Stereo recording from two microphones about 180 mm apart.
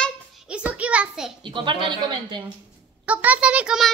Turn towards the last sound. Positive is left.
turn(degrees=-5)  # may be behind; listen again after turning